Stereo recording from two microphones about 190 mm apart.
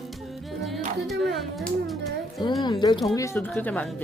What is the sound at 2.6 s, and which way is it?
Speech, 25° left (ahead or behind).